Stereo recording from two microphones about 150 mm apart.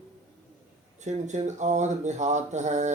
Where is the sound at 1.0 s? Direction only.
50° right (ahead or behind).